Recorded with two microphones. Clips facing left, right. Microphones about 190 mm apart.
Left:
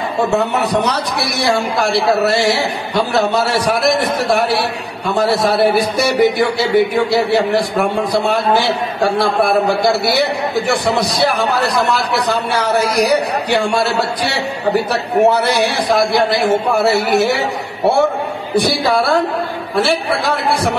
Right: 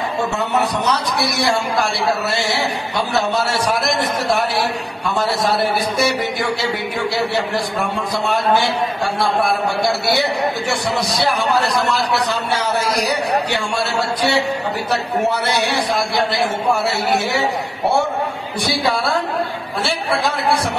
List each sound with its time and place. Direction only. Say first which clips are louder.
1.5 s a man's voice: left 4 dB; 60° left (ahead or behind)
9.0 s a man's voice: left 6 dB; 55° left (ahead or behind)
10.7 s a man's voice: left 4 dB; 60° left (ahead or behind)
14.9 s a man's voice: left 4 dB; 60° left (ahead or behind)
18.6 s a man's voice: left 4 dB; 60° left (ahead or behind)